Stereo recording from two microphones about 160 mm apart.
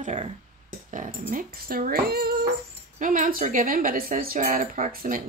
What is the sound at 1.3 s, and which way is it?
Speech, 60° right (ahead or behind).